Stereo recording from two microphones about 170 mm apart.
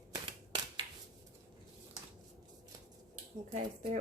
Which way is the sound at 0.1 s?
25° right (ahead or behind).